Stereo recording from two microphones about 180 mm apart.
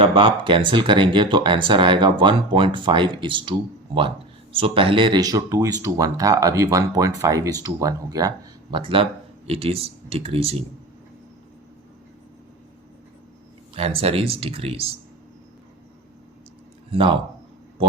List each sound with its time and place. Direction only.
0.0 s speech: 30° right (ahead or behind)
4.5 s speech: 30° right (ahead or behind)
13.7 s speech: 35° right (ahead or behind)
16.9 s speech: 30° right (ahead or behind)